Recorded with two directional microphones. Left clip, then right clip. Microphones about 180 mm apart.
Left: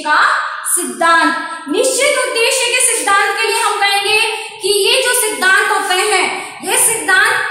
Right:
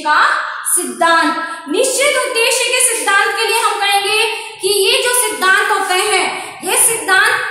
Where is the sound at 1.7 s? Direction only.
20° right (ahead or behind).